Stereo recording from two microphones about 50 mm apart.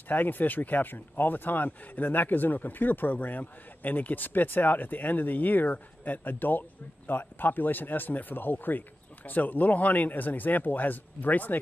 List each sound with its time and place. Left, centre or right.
0.1 s speech: left